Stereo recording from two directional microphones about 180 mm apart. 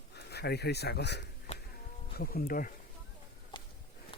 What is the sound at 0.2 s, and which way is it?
Speech, 65° left (ahead or behind).